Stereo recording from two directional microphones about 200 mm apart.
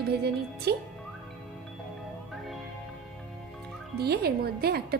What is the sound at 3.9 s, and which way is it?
Speech, 55° right (ahead or behind).